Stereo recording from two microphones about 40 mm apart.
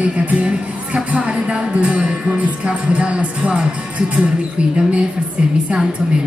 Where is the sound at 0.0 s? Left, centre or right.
Right.